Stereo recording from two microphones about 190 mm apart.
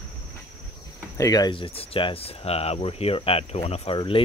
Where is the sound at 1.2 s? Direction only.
20° left (ahead or behind).